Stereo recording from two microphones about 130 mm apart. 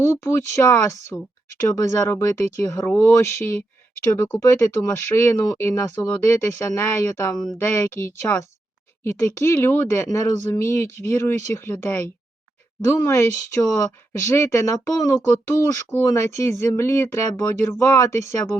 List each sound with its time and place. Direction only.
0.1 s speech: 20° left (ahead or behind)